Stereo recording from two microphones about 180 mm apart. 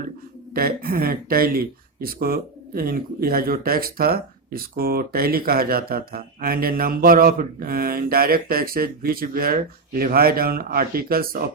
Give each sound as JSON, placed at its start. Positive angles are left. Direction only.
{"t": 0.5, "sound": "speech", "side_deg": -55}